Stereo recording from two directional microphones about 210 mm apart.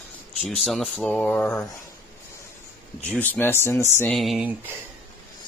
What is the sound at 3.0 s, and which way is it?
Speech, 5° left (ahead or behind).